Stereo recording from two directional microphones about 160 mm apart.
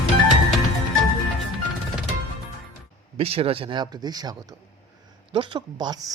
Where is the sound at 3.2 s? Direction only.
35° right (ahead or behind).